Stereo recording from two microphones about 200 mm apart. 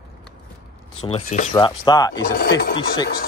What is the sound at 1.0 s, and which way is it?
Speech, 30° left (ahead or behind).